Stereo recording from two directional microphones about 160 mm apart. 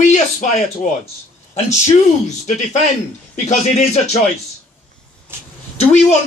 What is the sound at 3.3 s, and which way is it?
Speech, 45° left (ahead or behind).